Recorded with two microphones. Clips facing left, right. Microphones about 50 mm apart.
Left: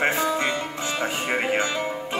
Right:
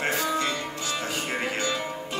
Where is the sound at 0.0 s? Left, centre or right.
Left.